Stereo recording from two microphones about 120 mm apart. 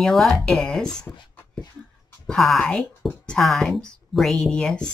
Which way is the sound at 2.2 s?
Centre (ahead or behind).